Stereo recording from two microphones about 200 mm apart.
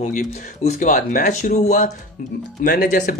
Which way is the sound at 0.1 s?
40° left (ahead or behind).